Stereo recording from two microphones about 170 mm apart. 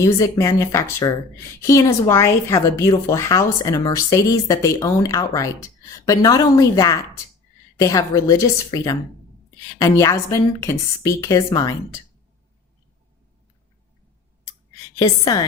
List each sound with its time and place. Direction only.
0.0 s a woman's voice: 20° left (ahead or behind)
14.9 s a woman's voice: 25° left (ahead or behind)